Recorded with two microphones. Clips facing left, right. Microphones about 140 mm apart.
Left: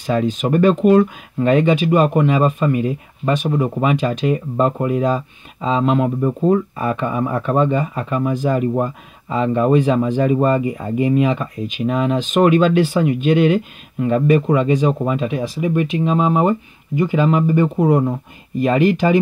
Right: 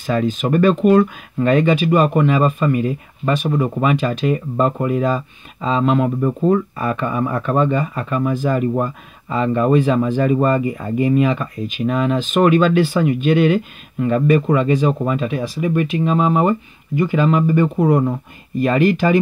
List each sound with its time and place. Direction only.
0.0 s speech: 20° left (ahead or behind)